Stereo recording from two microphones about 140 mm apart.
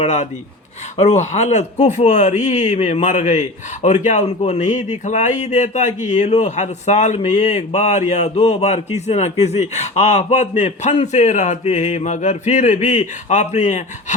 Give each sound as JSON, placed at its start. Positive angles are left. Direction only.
{"t": 0.0, "sound": "speech", "side_deg": 55}